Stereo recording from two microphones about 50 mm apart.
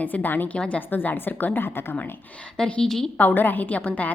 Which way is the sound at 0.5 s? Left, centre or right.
Left.